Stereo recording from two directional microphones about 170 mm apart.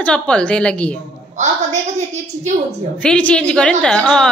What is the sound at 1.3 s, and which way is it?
Speech, 45° right (ahead or behind).